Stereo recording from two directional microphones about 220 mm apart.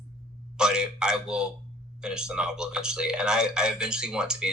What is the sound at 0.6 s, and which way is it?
Speech, 5° right (ahead or behind).